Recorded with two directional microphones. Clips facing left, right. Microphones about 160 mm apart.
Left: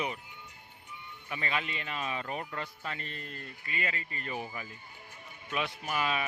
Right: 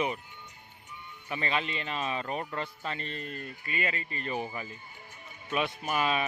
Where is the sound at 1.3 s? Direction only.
30° right (ahead or behind).